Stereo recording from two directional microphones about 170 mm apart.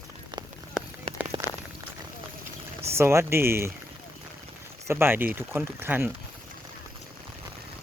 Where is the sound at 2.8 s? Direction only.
15° right (ahead or behind).